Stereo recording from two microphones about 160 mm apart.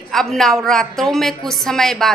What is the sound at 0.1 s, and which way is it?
A woman's voice, centre (ahead or behind).